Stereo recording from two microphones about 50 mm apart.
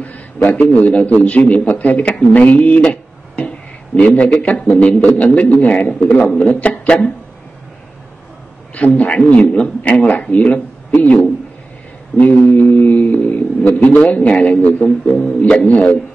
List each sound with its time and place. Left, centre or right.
0.0 s a man's voice: left
8.7 s a man's voice: left
12.2 s a man's voice: left